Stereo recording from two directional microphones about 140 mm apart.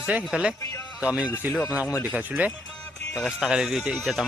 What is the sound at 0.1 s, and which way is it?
Speech, 10° right (ahead or behind).